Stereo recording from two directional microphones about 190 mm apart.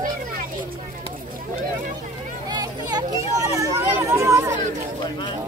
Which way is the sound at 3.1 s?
15° right (ahead or behind).